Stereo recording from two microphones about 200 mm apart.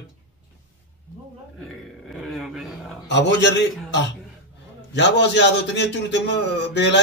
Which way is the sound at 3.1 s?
60° left (ahead or behind).